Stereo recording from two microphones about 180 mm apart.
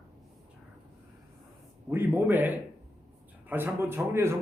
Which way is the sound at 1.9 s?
10° right (ahead or behind).